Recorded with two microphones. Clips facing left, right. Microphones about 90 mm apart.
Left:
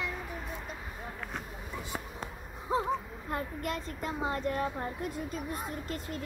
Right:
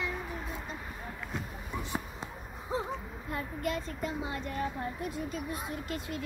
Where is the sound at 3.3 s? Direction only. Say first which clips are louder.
Even; 50° left (ahead or behind).